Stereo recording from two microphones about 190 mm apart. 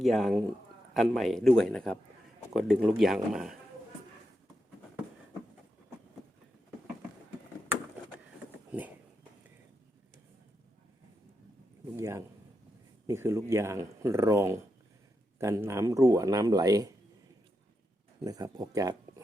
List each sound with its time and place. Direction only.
0.0 s speech: centre (ahead or behind)
11.9 s a sound: 15° right (ahead or behind)
13.1 s speech: 15° right (ahead or behind)
18.2 s speech: 20° right (ahead or behind)